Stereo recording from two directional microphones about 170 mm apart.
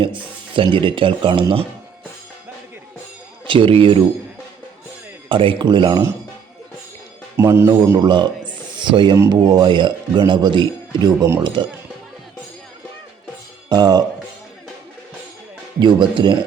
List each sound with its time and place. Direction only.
0.0 s speech: 30° right (ahead or behind)
3.4 s speech: 30° right (ahead or behind)
5.3 s speech: 30° right (ahead or behind)
7.3 s speech: 15° right (ahead or behind)
7.9 s speech: 25° right (ahead or behind)
9.1 s speech: 15° right (ahead or behind)
9.4 s speech: 25° right (ahead or behind)
13.7 s speech: 25° right (ahead or behind)
15.8 s speech: 30° right (ahead or behind)